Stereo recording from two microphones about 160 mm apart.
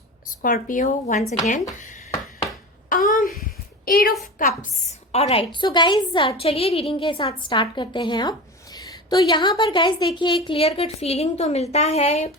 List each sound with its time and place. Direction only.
0.4 s speech: 55° left (ahead or behind)
2.9 s a sound: 60° left (ahead or behind)
4.4 s a woman's voice: 60° left (ahead or behind)
5.1 s a woman's voice: 40° left (ahead or behind)